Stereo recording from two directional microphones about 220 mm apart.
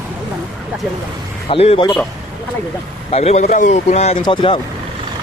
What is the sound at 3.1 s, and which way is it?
Speech, 30° left (ahead or behind).